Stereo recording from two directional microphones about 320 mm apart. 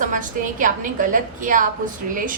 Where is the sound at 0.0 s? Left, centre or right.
Right.